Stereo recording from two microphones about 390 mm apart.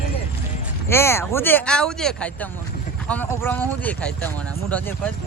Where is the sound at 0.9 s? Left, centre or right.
Centre.